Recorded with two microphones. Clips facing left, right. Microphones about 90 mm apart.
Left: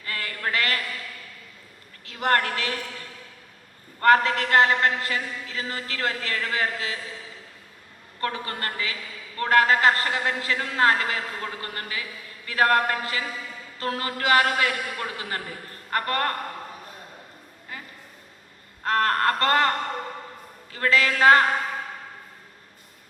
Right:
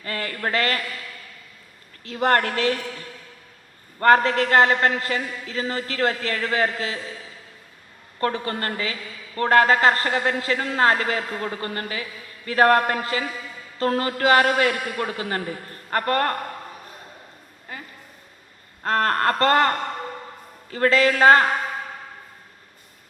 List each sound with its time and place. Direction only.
0.0 s a man's voice: 35° right (ahead or behind)
2.0 s a man's voice: 35° right (ahead or behind)
4.0 s a man's voice: 35° right (ahead or behind)
8.2 s a man's voice: 35° right (ahead or behind)
18.9 s a man's voice: 35° right (ahead or behind)